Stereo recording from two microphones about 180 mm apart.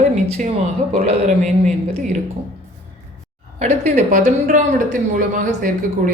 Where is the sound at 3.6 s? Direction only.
40° right (ahead or behind).